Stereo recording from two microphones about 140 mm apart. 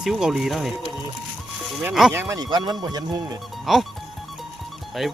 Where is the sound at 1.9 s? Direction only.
Centre (ahead or behind).